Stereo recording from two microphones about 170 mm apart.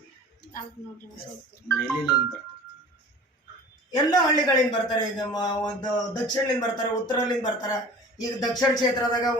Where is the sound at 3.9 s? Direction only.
25° left (ahead or behind).